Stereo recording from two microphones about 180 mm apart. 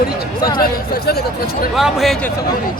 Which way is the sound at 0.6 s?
60° left (ahead or behind).